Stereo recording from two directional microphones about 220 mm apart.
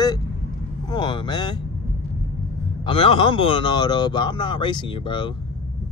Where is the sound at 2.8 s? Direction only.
25° left (ahead or behind).